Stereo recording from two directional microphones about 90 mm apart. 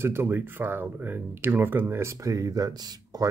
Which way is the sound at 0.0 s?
25° right (ahead or behind).